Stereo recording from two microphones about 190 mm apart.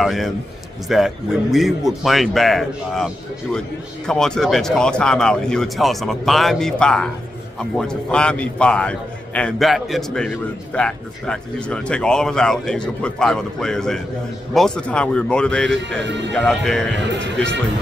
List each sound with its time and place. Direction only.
0.0 s a man's voice: centre (ahead or behind)
16.0 s speech: 70° right (ahead or behind)
16.3 s a man's voice: centre (ahead or behind)
16.9 s speech: 65° right (ahead or behind)